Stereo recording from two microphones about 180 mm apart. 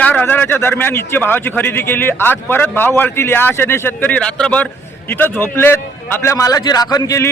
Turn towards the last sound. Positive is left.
turn(degrees=15)  # may be behind; listen again after turning